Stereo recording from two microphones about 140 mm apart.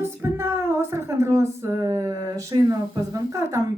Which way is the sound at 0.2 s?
20° right (ahead or behind).